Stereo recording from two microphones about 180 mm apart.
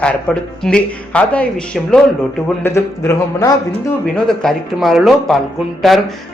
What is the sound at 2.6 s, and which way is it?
Speech, 15° left (ahead or behind).